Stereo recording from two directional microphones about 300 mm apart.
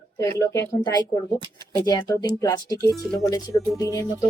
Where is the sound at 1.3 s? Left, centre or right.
Centre.